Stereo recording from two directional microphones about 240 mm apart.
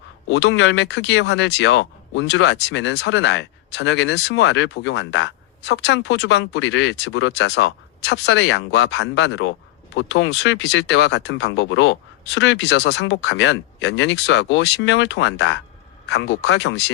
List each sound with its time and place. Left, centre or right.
0.3 s speech: left